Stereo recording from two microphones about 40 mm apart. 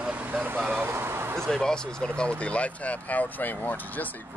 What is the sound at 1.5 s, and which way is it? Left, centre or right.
Speech, centre.